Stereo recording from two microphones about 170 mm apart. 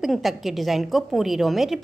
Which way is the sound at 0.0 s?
Centre (ahead or behind).